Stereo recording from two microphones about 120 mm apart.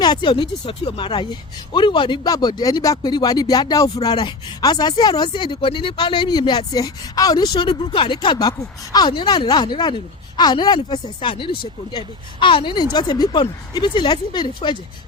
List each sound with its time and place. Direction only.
0.0 s speech: 40° left (ahead or behind)